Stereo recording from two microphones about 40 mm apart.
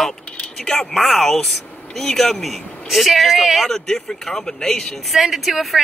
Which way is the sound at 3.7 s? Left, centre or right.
Centre.